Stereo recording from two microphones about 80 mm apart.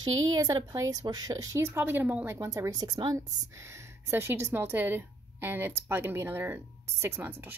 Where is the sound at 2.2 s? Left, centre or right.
Right.